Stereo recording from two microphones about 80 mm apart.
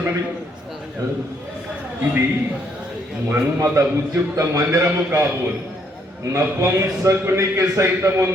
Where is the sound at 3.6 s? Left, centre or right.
Right.